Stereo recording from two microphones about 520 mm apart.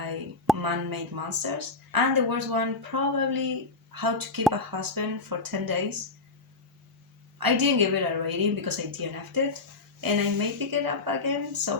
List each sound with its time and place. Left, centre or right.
0.5 s speech: right
7.3 s speech: right